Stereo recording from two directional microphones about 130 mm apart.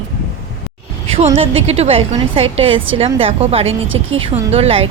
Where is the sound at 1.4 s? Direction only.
50° right (ahead or behind).